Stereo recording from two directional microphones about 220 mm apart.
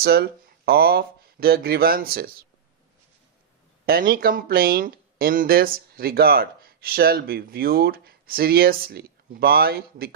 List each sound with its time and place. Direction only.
0.0 s speech: 45° right (ahead or behind)
3.8 s speech: 40° right (ahead or behind)